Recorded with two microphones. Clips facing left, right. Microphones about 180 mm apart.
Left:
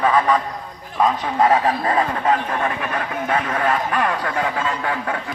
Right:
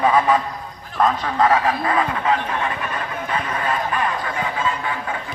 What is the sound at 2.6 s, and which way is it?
Speech, 60° left (ahead or behind).